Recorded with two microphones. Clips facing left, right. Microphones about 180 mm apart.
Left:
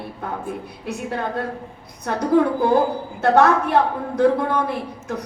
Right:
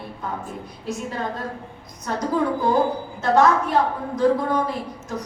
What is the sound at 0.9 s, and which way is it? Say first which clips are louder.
A woman's voice: left 2 dB; 60° left (ahead or behind).